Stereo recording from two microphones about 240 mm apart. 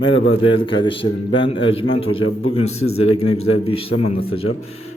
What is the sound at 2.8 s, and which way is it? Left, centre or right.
Speech, left.